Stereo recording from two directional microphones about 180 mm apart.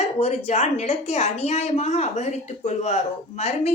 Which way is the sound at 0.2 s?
35° left (ahead or behind).